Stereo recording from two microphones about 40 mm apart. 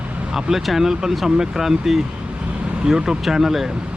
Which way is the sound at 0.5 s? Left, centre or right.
Centre.